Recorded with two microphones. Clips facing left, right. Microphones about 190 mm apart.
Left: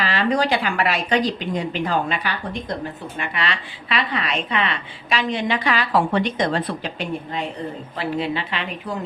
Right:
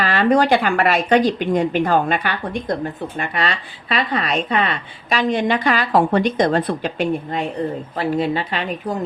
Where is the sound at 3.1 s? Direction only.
45° right (ahead or behind).